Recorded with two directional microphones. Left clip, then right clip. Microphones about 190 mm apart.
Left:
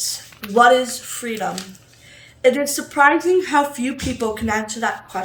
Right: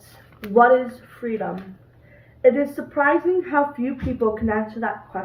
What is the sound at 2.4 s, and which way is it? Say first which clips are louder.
A woman's voice: left 1 dB; 15° left (ahead or behind).